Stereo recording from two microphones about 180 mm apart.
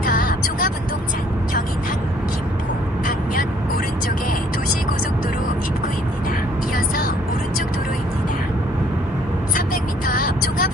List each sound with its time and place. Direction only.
0.0 s vehicle: 50° left (ahead or behind)
6.7 s vehicle: 50° left (ahead or behind)
10.1 s music: 50° left (ahead or behind)